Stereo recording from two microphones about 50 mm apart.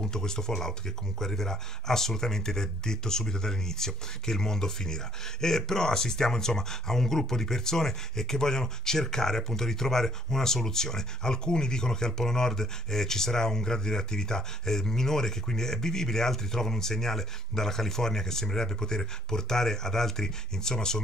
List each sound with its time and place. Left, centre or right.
0.0 s speech: centre